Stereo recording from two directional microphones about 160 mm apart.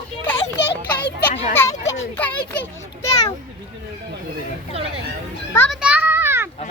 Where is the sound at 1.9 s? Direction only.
10° left (ahead or behind).